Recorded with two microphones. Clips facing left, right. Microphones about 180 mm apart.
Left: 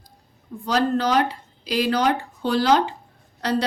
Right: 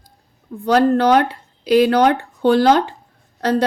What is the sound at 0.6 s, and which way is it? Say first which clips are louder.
Speech: right 7 dB; 60° right (ahead or behind).